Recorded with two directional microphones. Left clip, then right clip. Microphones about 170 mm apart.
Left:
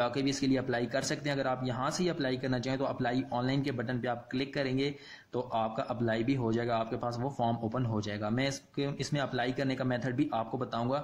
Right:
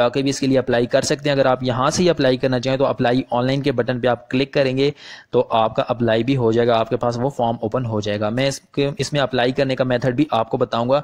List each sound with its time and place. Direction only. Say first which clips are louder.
0.0 s speech: right 13 dB; 50° right (ahead or behind)